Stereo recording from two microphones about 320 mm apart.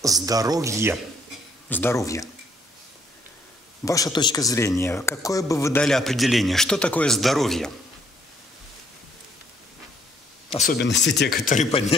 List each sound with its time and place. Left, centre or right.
0.0 s speech: centre
1.7 s a man's voice: centre
3.8 s speech: centre
10.5 s speech: left